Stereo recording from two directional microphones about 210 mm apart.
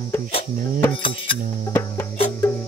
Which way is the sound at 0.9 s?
25° left (ahead or behind).